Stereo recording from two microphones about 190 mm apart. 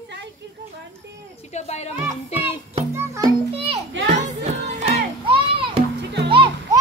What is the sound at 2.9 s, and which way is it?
Speech, 15° right (ahead or behind).